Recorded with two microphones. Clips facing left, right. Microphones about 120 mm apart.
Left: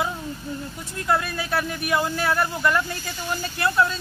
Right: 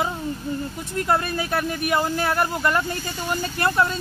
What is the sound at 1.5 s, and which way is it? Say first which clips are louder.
Speech: even; 45° right (ahead or behind).